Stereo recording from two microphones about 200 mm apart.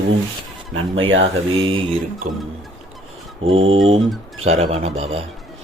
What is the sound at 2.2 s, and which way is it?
Speech, 40° right (ahead or behind).